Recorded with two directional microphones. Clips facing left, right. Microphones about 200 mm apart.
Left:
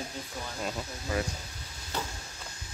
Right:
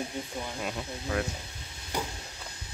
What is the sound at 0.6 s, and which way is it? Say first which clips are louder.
Speech: right 1 dB; centre (ahead or behind).